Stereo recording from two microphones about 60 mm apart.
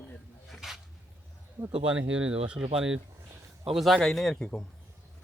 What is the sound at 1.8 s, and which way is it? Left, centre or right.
Speech, centre.